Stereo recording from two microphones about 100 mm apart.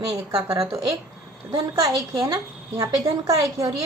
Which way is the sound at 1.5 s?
45° right (ahead or behind).